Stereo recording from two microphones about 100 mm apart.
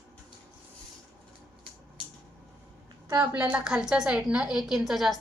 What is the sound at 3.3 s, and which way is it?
A woman's voice, 15° right (ahead or behind).